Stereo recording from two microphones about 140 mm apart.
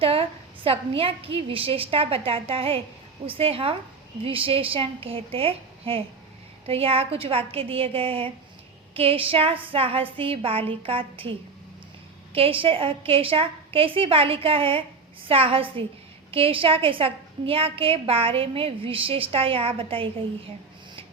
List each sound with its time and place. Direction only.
0.0 s a woman's voice: 40° right (ahead or behind)